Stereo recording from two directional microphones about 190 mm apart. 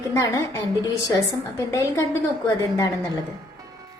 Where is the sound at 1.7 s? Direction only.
15° left (ahead or behind).